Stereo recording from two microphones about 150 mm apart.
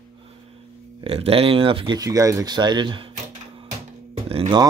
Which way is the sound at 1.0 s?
40° right (ahead or behind).